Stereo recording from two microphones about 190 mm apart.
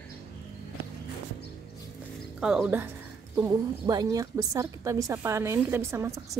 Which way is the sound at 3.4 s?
20° right (ahead or behind).